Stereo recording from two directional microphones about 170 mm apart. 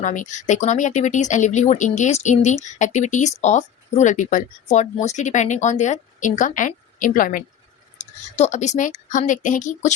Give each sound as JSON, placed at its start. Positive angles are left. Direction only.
{"t": 0.0, "sound": "speech", "side_deg": 45}
{"t": 7.9, "sound": "speech", "side_deg": 40}